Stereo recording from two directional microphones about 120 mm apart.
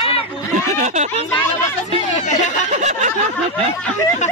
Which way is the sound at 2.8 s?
75° right (ahead or behind).